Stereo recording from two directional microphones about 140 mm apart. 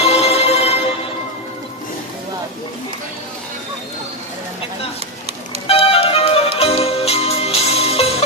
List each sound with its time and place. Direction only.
0.0 s music: 45° left (ahead or behind)
5.6 s music: 45° left (ahead or behind)